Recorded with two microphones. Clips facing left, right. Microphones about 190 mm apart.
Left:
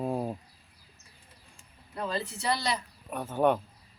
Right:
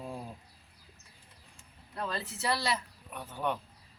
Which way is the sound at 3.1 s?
50° left (ahead or behind).